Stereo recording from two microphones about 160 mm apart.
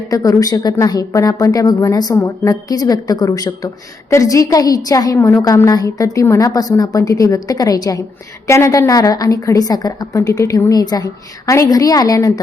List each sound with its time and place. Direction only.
0.1 s a woman's voice: 20° left (ahead or behind)